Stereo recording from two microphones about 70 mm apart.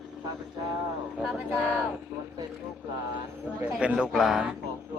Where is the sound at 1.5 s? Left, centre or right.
Left.